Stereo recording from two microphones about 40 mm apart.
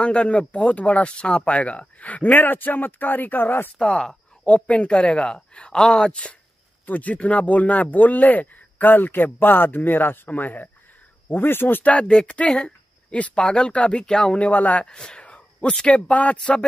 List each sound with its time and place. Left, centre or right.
0.0 s speech: left
3.8 s speech: centre
4.5 s speech: left
6.9 s speech: left
11.2 s speech: left
11.8 s a woman's voice: left; by 14.4 s centre
14.4 s speech: left
14.9 s speech: left
15.2 s a sound: left
16.1 s speech: left